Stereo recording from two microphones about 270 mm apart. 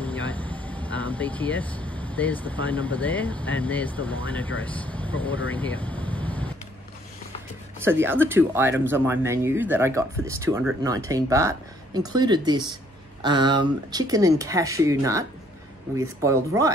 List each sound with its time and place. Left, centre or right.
0.0 s speech: centre
7.8 s speech: centre
16.3 s speech: centre